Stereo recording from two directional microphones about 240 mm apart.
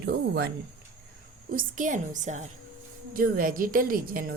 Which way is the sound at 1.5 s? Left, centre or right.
Right.